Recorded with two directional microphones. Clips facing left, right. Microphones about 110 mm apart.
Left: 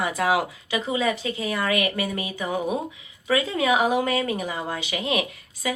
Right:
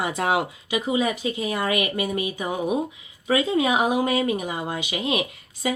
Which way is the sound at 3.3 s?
20° right (ahead or behind).